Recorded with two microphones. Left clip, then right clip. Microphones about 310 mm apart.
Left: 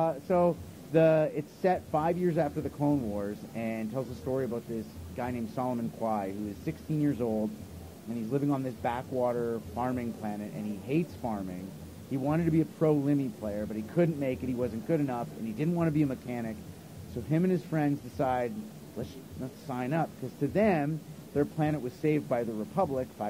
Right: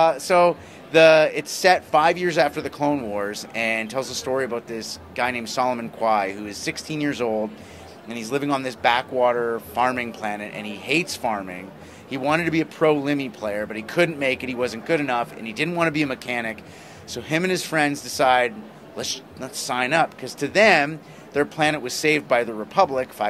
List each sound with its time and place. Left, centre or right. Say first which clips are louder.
0.0 s speech: right 10 dB; centre
7.2 s speech: right 8 dB; right
8.1 s speech: right 7 dB; centre